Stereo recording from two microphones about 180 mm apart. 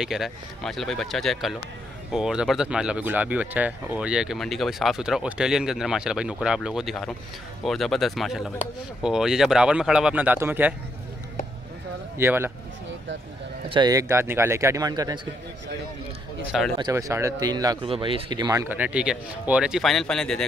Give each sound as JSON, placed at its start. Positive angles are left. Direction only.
{"t": 0.0, "sound": "speech", "side_deg": 0}
{"t": 12.2, "sound": "speech", "side_deg": -10}
{"t": 13.7, "sound": "speech", "side_deg": -25}
{"t": 16.5, "sound": "speech", "side_deg": 0}
{"t": 16.9, "sound": "speech", "side_deg": -15}